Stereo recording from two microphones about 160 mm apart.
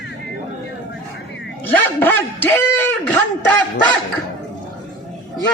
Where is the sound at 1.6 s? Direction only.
10° left (ahead or behind).